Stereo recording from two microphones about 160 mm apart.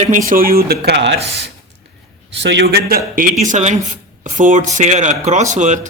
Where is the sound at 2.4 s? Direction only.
90° right.